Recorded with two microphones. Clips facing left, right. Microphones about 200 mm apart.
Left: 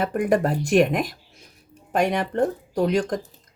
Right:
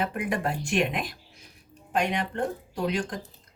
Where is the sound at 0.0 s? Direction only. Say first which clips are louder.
Left 7 dB; 45° left (ahead or behind).